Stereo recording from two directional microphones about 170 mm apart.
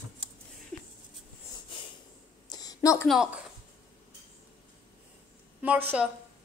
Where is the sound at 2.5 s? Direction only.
20° left (ahead or behind).